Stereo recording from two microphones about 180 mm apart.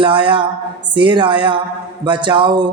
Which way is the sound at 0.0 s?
25° right (ahead or behind).